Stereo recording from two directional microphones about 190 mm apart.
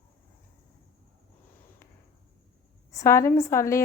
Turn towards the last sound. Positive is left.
turn(degrees=15)  # may be behind; listen again after turning